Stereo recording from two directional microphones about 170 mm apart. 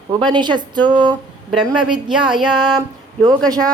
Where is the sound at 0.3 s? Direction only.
25° right (ahead or behind).